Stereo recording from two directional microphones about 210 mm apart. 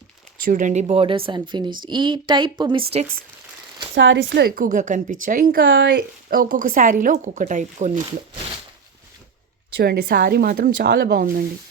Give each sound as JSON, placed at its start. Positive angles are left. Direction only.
{"t": 0.4, "sound": "speech", "side_deg": -35}
{"t": 3.9, "sound": "speech", "side_deg": -60}
{"t": 6.4, "sound": "speech", "side_deg": -40}
{"t": 9.7, "sound": "speech", "side_deg": -50}